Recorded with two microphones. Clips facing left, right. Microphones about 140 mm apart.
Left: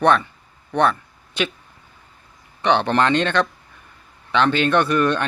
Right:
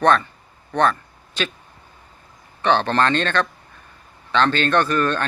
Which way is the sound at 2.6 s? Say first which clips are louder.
Left 1 dB; 15° left (ahead or behind).